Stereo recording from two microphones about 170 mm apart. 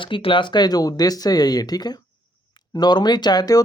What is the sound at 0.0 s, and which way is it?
Speech, 30° left (ahead or behind).